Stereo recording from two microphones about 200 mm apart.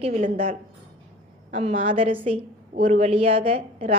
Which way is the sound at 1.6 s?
30° right (ahead or behind).